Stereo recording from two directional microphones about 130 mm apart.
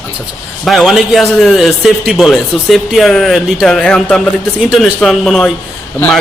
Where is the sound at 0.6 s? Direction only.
Centre (ahead or behind).